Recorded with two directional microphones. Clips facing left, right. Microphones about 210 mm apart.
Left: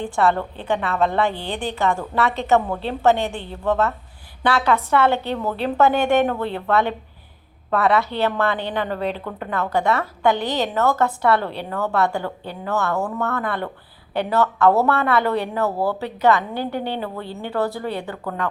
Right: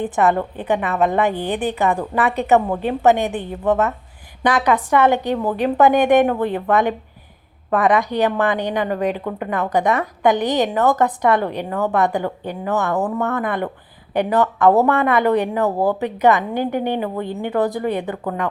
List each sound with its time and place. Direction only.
0.0 s a woman's voice: 20° right (ahead or behind)